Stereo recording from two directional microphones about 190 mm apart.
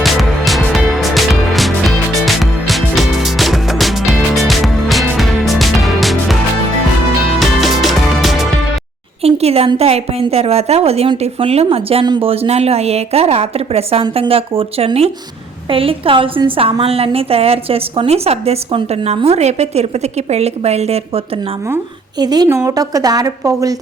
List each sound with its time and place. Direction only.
0.0 s music: centre (ahead or behind)
9.2 s a woman's voice: 30° right (ahead or behind)
22.2 s a woman's voice: 20° right (ahead or behind)